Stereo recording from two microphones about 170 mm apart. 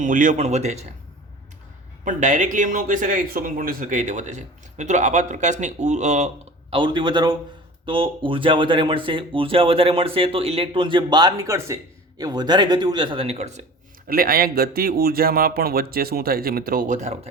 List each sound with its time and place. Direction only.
0.0 s speech: 50° right (ahead or behind)
2.0 s speech: 45° right (ahead or behind)
14.1 s speech: 60° right (ahead or behind); by 17.2 s 45° right (ahead or behind)